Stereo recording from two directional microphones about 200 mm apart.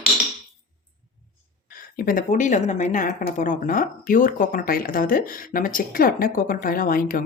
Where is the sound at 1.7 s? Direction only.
45° left (ahead or behind).